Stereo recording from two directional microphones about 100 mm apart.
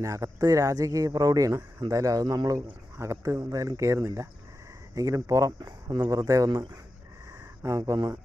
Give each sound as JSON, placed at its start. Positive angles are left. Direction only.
{"t": 0.0, "sound": "speech", "side_deg": -35}